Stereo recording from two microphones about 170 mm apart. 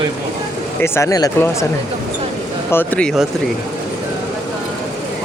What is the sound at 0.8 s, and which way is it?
Speech, 15° left (ahead or behind).